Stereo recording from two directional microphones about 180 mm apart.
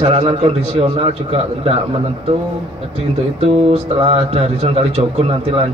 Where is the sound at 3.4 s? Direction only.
35° right (ahead or behind).